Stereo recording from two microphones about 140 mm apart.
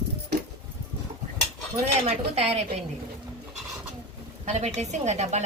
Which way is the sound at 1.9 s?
50° right (ahead or behind).